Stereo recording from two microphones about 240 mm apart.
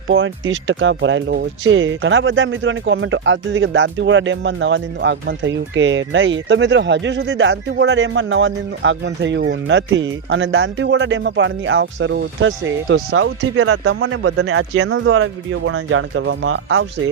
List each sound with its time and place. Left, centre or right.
0.1 s speech: right